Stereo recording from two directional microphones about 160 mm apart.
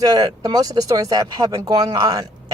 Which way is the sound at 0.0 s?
25° right (ahead or behind).